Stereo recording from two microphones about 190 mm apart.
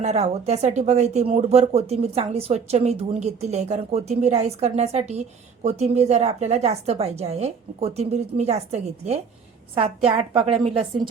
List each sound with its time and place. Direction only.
0.0 s speech: 35° right (ahead or behind)